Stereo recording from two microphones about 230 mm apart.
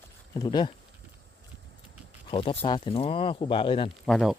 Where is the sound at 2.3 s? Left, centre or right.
Left.